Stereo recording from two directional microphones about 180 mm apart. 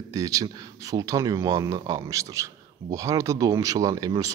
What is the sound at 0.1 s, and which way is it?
A man's voice, 20° right (ahead or behind).